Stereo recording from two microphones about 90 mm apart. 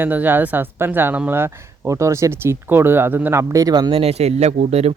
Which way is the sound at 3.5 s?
40° right (ahead or behind).